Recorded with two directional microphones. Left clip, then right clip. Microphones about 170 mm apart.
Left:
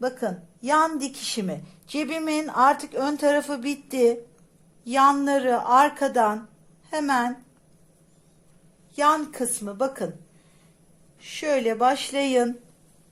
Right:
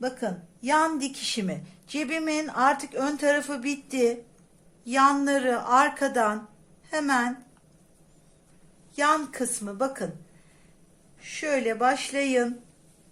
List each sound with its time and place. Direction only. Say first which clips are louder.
0.0 s a woman's voice: left 3 dB; 20° left (ahead or behind)
9.0 s a woman's voice: left 3 dB; 15° left (ahead or behind)
11.2 s a woman's voice: left 3 dB; 25° left (ahead or behind)